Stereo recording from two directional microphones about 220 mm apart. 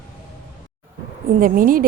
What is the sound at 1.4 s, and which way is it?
Speech, 40° right (ahead or behind).